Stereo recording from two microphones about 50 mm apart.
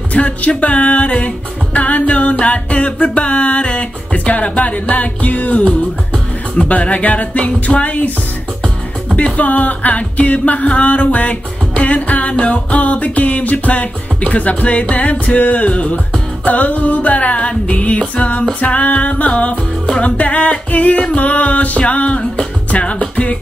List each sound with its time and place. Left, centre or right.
0.1 s music: left
6.7 s music: left
9.4 s music: left